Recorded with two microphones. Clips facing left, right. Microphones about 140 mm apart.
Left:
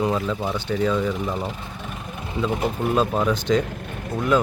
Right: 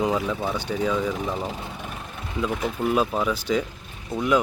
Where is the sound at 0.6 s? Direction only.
5° right (ahead or behind).